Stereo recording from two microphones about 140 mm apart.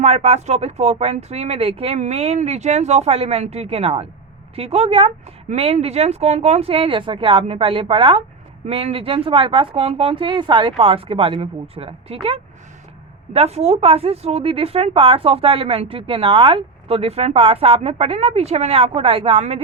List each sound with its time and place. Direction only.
0.0 s speech: 50° right (ahead or behind)